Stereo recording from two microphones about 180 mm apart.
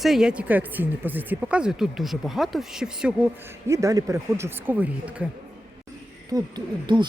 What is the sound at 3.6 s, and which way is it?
Speech, 15° right (ahead or behind).